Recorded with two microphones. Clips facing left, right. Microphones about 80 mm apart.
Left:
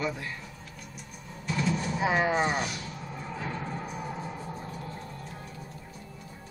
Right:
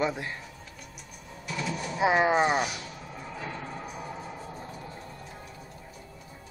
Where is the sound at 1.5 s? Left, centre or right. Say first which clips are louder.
Left 3 dB; centre.